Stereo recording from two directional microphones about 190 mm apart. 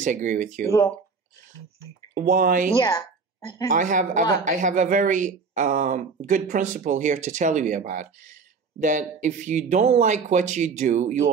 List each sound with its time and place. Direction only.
0.0 s speech: 40° right (ahead or behind)
2.1 s speech: 45° right (ahead or behind)
2.8 s a woman's voice: 20° left (ahead or behind)
3.7 s speech: 40° right (ahead or behind)